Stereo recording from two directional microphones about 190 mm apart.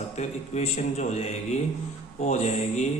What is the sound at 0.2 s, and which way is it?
A man's voice, 35° left (ahead or behind).